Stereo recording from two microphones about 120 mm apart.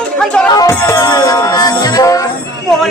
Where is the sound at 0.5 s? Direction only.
25° left (ahead or behind).